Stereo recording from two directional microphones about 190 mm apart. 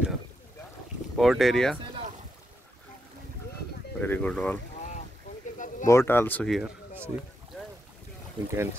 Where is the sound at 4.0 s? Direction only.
10° left (ahead or behind).